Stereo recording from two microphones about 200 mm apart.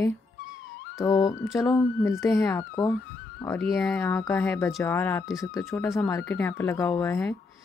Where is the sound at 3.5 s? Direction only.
Centre (ahead or behind).